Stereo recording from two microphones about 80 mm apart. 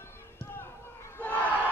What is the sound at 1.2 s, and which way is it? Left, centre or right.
Battle cry, centre.